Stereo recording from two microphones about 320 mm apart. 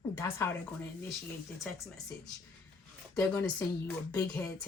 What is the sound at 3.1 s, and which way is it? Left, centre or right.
Speech, centre.